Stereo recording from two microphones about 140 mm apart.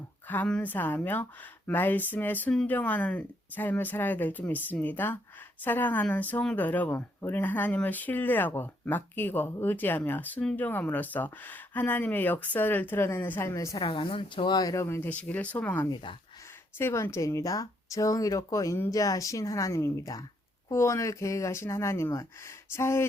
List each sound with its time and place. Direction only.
0.3 s speech: 10° left (ahead or behind)
13.8 s speech: 40° left (ahead or behind); by 23.0 s 20° left (ahead or behind)